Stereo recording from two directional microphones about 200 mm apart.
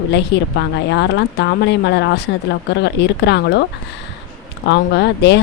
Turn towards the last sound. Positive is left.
turn(degrees=55)  # may be behind; listen again after turning